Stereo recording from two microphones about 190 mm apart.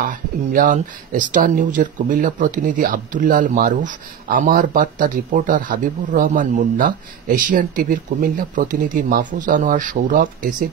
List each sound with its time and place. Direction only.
0.0 s speech: 45° right (ahead or behind)